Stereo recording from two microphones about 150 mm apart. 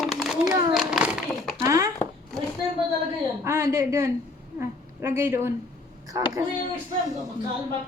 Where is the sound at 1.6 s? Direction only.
20° right (ahead or behind).